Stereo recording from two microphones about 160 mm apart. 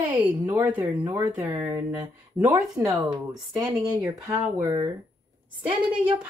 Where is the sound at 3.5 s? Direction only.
20° right (ahead or behind).